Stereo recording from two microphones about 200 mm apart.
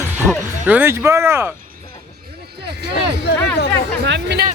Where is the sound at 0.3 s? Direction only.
10° right (ahead or behind).